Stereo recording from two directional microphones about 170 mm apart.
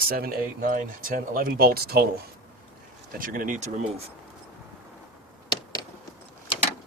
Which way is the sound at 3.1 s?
55° right (ahead or behind).